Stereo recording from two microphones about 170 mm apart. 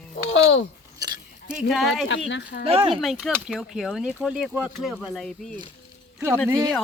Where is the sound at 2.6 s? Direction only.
35° right (ahead or behind).